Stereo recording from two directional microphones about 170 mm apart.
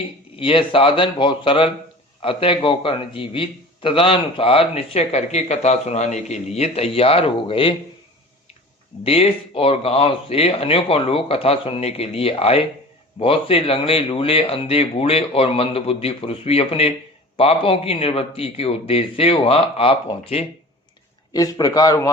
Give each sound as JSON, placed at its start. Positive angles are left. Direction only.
{"t": 0.3, "sound": "a man's voice", "side_deg": 30}
{"t": 9.0, "sound": "a man's voice", "side_deg": 35}
{"t": 21.3, "sound": "a man's voice", "side_deg": 20}